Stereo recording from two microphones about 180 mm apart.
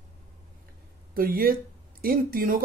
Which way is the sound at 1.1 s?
55° right (ahead or behind).